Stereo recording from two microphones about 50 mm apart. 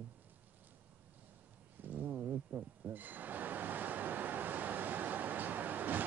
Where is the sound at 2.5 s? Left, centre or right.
Right.